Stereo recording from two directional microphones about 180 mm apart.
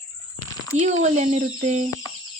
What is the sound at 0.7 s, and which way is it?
Speech, 40° right (ahead or behind).